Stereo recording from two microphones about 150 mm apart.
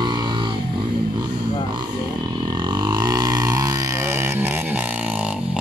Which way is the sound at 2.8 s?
30° right (ahead or behind).